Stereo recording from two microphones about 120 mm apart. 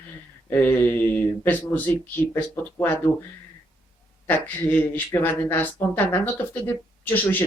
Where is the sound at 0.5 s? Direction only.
15° left (ahead or behind).